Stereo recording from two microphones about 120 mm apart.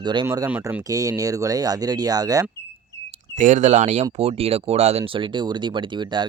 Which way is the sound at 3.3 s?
90° right.